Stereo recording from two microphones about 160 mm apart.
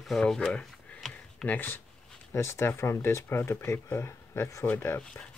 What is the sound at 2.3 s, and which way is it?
Speech, 15° left (ahead or behind).